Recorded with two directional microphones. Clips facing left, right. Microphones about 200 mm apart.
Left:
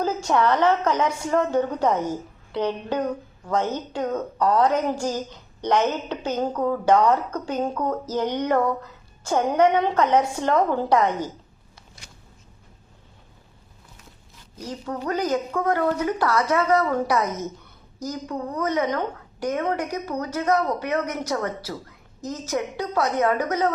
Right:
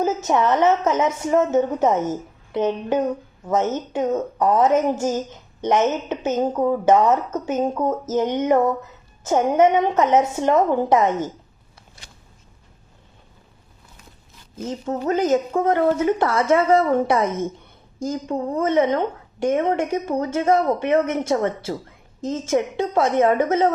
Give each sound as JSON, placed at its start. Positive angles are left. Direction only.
{"t": 0.0, "sound": "a woman's voice", "side_deg": -20}
{"t": 14.5, "sound": "a woman's voice", "side_deg": -25}